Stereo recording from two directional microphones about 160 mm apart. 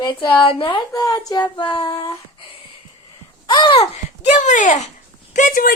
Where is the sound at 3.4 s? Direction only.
30° left (ahead or behind).